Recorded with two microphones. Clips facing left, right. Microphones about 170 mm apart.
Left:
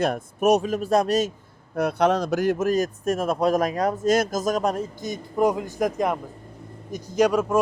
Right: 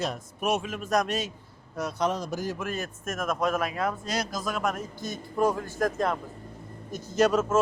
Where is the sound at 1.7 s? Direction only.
60° left (ahead or behind).